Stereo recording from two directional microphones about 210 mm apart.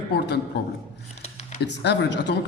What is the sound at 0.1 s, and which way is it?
Speech, 50° left (ahead or behind).